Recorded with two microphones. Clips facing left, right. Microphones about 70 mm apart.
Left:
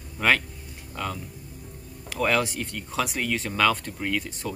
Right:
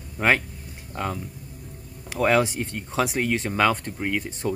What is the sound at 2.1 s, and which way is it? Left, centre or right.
Speech, centre.